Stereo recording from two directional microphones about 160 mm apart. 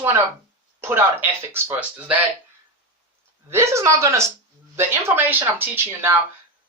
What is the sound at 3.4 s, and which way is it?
Speech, 15° right (ahead or behind).